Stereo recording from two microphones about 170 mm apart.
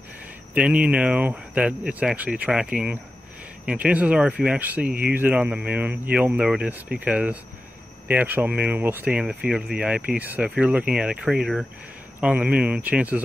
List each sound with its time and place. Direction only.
0.6 s speech: 5° right (ahead or behind)